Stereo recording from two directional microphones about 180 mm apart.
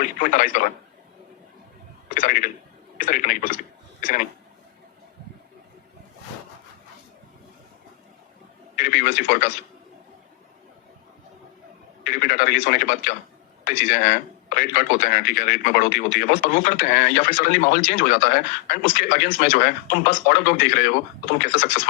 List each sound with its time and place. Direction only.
0.0 s a man's voice: 50° left (ahead or behind)
2.0 s a man's voice: 50° left (ahead or behind)
8.7 s speech: 55° left (ahead or behind)
12.0 s a man's voice: 55° left (ahead or behind)